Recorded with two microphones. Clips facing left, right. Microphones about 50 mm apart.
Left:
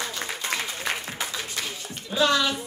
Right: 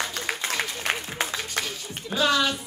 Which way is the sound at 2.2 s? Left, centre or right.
Centre.